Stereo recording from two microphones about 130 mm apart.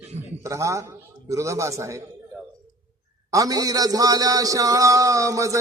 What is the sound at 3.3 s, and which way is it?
A man's voice, 25° right (ahead or behind).